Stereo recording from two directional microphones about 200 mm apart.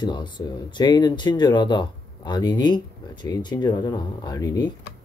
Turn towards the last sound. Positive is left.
turn(degrees=20)  # may be behind; listen again after turning